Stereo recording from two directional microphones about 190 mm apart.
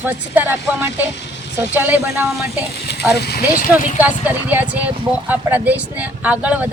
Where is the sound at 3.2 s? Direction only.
55° left (ahead or behind).